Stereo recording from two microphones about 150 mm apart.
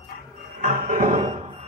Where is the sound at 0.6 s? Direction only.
55° right (ahead or behind).